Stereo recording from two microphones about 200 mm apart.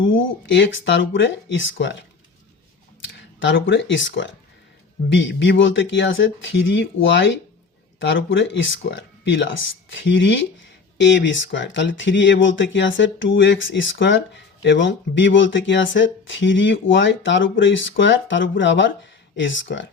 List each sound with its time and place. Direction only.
0.0 s speech: 70° left (ahead or behind)
3.5 s speech: 65° left (ahead or behind)